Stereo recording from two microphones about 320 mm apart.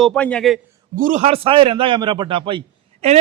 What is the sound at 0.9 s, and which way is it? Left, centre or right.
A man's voice, right.